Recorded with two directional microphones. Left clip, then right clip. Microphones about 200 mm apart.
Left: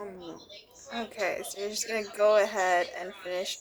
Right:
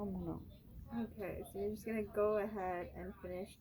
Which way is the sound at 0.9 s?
35° left (ahead or behind).